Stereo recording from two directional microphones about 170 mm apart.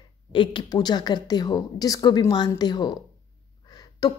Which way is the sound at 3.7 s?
25° left (ahead or behind).